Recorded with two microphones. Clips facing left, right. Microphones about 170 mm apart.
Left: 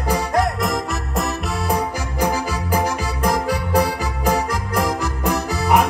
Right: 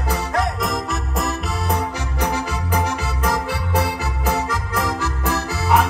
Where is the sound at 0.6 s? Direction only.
Centre (ahead or behind).